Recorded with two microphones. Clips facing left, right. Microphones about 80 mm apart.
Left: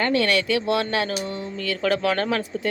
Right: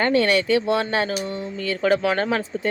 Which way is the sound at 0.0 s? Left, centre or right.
Right.